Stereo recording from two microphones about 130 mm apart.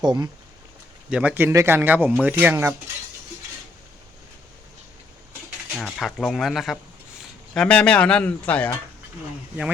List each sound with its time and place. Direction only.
0.0 s speech: 35° right (ahead or behind)
1.1 s a man's voice: 10° right (ahead or behind)
5.7 s a man's voice: 5° left (ahead or behind)